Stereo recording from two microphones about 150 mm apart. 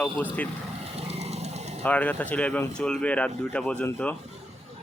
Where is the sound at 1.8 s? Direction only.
10° left (ahead or behind).